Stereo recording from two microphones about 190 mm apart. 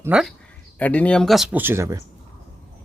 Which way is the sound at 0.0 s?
5° right (ahead or behind).